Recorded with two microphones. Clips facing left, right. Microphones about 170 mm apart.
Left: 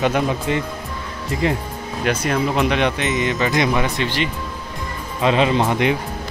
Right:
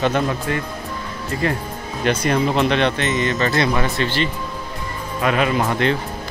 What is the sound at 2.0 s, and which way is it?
Speech, 5° left (ahead or behind).